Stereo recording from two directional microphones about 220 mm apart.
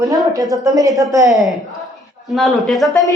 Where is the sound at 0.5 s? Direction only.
15° right (ahead or behind).